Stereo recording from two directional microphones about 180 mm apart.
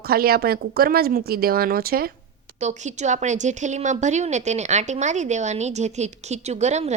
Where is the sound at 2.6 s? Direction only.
40° right (ahead or behind).